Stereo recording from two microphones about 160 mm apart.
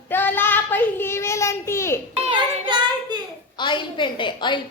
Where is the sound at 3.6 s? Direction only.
30° left (ahead or behind).